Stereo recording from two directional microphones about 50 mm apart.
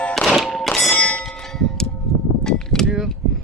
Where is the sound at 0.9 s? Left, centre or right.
Left.